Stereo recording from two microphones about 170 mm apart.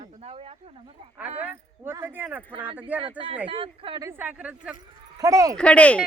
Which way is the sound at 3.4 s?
30° right (ahead or behind).